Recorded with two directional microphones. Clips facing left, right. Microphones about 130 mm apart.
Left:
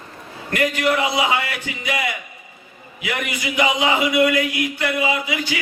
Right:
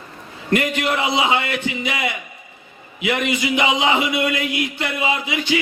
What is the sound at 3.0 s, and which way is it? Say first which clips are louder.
Speech: right 5 dB; 20° right (ahead or behind).